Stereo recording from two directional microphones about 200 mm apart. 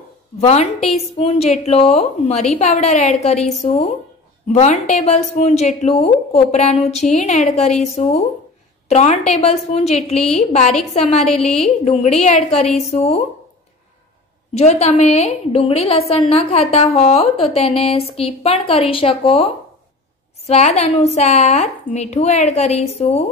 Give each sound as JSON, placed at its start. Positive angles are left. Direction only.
{"t": 0.4, "sound": "a woman's voice", "side_deg": 35}
{"t": 14.5, "sound": "a woman's voice", "side_deg": 30}